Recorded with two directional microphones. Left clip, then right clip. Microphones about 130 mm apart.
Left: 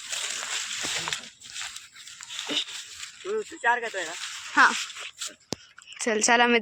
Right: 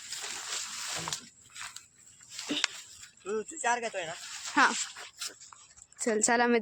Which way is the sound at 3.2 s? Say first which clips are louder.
Left 5 dB; 60° left (ahead or behind).